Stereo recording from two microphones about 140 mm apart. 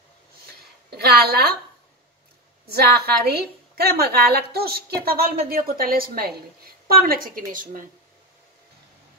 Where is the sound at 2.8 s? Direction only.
90° right; by 7.9 s 70° right (ahead or behind).